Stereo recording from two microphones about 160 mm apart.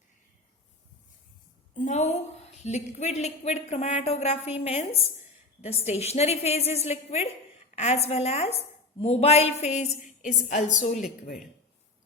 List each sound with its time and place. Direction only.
1.7 s a woman's voice: 50° left (ahead or behind)